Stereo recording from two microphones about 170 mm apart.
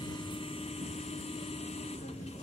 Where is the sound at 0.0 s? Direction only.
30° left (ahead or behind).